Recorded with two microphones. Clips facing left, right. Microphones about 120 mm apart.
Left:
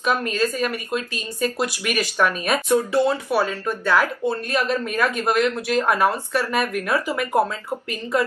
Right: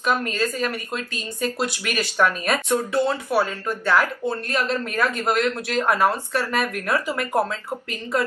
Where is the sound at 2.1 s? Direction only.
10° left (ahead or behind).